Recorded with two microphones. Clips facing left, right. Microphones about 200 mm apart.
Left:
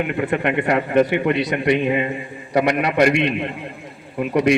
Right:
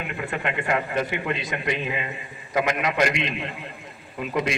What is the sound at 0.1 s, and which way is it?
A man's voice, 60° left (ahead or behind).